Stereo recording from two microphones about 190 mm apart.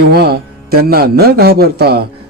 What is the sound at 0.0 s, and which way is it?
A man's voice, 55° right (ahead or behind).